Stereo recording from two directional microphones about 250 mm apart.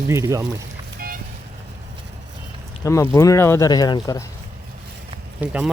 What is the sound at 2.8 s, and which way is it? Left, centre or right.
Speech, centre.